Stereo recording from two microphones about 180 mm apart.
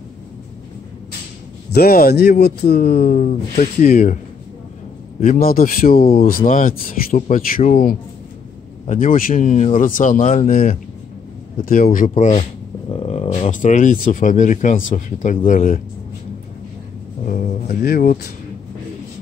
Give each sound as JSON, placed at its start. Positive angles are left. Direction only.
{"t": 1.7, "sound": "speech", "side_deg": 55}
{"t": 5.2, "sound": "speech", "side_deg": 50}
{"t": 17.2, "sound": "speech", "side_deg": 45}